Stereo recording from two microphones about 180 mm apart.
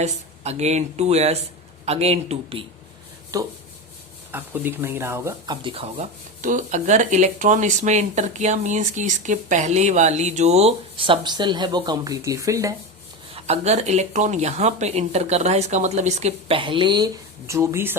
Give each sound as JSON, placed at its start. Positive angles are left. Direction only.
{"t": 0.0, "sound": "speech", "side_deg": -35}
{"t": 3.3, "sound": "rub", "side_deg": -20}
{"t": 4.3, "sound": "speech", "side_deg": -10}
{"t": 5.6, "sound": "speech", "side_deg": -35}
{"t": 6.4, "sound": "speech", "side_deg": -45}
{"t": 13.3, "sound": "speech", "side_deg": -35}